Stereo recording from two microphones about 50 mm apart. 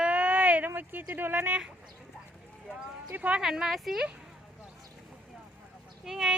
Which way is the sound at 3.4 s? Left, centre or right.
Centre.